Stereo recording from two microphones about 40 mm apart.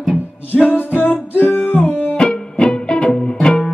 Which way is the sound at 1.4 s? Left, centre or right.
Left.